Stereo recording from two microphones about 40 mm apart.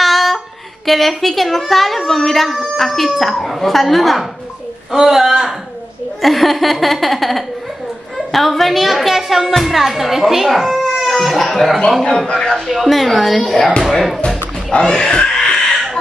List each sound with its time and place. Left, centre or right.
0.0 s a sound: centre
0.8 s a woman's voice: centre
12.6 s a woman's voice: centre
13.4 s speech: centre
13.8 s a woman's voice: centre
14.7 s a sound: left